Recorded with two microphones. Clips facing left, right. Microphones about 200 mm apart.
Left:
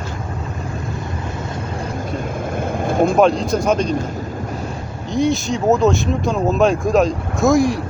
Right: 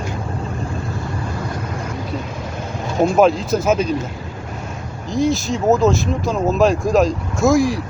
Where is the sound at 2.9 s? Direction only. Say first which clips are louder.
Left 1 dB; 55° left (ahead or behind).